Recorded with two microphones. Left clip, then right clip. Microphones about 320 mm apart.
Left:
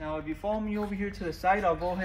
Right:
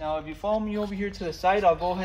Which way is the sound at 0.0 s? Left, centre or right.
Right.